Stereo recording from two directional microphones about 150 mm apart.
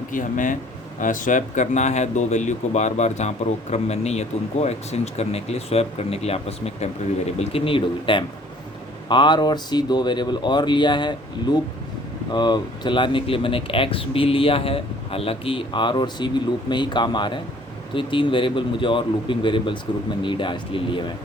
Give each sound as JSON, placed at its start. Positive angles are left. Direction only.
{"t": 0.1, "sound": "speech", "side_deg": 60}